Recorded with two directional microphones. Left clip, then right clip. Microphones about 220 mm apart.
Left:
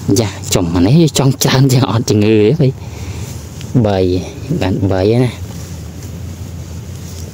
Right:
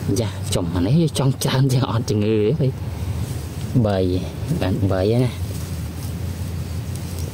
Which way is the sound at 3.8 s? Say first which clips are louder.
Left 7 dB; 45° left (ahead or behind).